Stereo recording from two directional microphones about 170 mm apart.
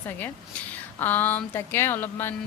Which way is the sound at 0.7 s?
10° left (ahead or behind).